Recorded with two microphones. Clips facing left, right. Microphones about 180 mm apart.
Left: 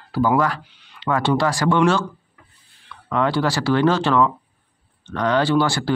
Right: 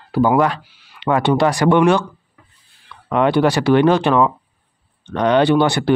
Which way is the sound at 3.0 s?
20° right (ahead or behind).